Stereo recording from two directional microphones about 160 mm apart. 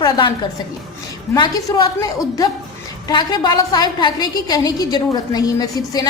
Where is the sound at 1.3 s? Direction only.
20° left (ahead or behind).